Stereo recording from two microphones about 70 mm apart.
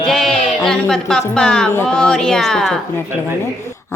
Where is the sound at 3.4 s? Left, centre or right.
Left.